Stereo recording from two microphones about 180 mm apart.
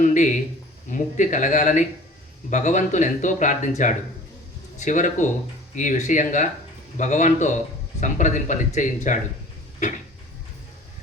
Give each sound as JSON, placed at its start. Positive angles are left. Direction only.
{"t": 0.0, "sound": "speech", "side_deg": 45}